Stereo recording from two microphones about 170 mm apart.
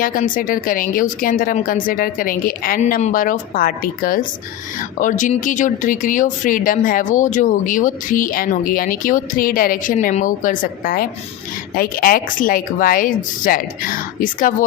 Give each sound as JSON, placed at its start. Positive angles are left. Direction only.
{"t": 0.0, "sound": "speech", "side_deg": 55}